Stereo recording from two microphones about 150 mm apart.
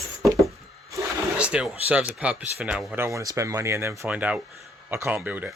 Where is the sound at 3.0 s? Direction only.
20° right (ahead or behind).